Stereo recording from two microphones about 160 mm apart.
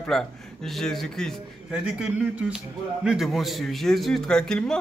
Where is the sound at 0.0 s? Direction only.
5° left (ahead or behind).